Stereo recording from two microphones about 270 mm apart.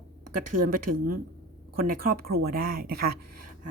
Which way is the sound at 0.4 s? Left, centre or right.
Right.